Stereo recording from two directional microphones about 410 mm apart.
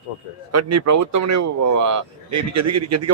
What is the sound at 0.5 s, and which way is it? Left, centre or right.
Speech, right.